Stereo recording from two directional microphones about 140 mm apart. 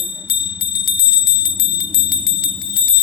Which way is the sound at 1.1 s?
90° left.